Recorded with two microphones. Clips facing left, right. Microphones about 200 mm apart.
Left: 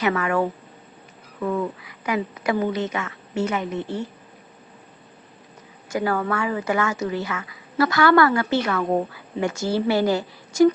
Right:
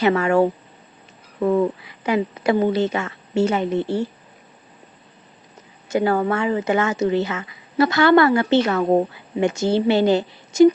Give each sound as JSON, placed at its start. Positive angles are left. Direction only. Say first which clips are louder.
{"t": 0.0, "sound": "speech", "louder": "right 5 dB", "side_deg": -30}
{"t": 5.9, "sound": "speech", "louder": "right 4 dB", "side_deg": -25}